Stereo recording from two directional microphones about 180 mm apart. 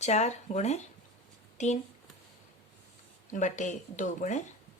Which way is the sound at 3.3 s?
45° left (ahead or behind).